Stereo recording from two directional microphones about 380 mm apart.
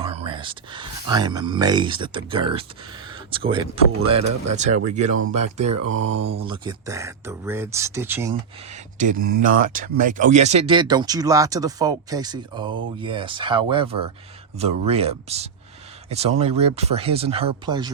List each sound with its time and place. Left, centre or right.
0.0 s speech: centre
5.0 s speech: right
5.7 s mantra: right
6.4 s speech: centre
9.0 s speech: right